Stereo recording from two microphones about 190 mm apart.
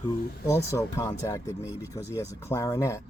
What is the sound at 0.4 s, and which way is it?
Speech, 15° left (ahead or behind).